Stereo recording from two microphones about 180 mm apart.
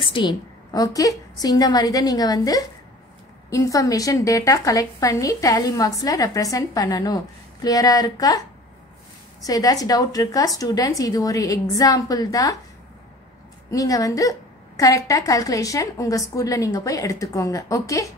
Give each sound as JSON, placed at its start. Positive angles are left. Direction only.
{"t": 0.0, "sound": "a woman's voice", "side_deg": 25}
{"t": 9.4, "sound": "a woman's voice", "side_deg": 20}
{"t": 13.7, "sound": "a woman's voice", "side_deg": 20}